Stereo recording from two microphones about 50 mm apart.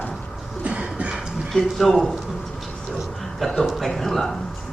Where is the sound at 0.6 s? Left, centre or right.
Right.